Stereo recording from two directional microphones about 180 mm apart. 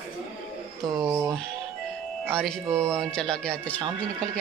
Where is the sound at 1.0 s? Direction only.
20° right (ahead or behind).